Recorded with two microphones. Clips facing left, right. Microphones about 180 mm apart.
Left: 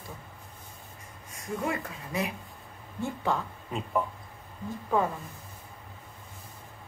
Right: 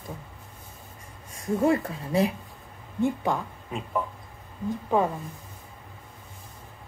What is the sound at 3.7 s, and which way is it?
Speech, centre (ahead or behind).